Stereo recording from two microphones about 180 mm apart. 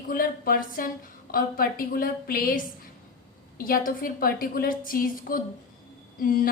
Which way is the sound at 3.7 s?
50° left (ahead or behind).